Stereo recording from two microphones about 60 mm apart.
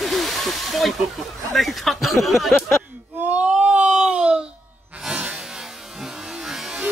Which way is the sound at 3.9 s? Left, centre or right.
Centre.